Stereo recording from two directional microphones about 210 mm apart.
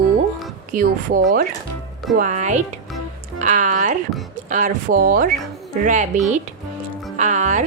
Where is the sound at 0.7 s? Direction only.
40° right (ahead or behind).